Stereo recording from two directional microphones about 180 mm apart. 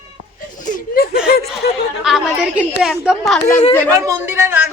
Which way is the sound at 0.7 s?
55° left (ahead or behind).